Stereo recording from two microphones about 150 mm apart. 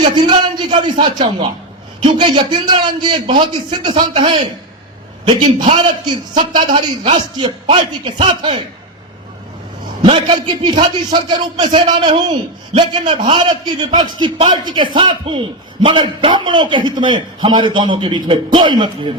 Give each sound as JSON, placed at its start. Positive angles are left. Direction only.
{"t": 0.2, "sound": "a man's voice", "side_deg": -30}
{"t": 7.0, "sound": "a man's voice", "side_deg": -45}
{"t": 7.8, "sound": "a man's voice", "side_deg": -30}
{"t": 10.0, "sound": "a man's voice", "side_deg": -30}